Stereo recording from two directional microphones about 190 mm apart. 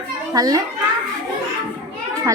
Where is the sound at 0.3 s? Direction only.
20° right (ahead or behind).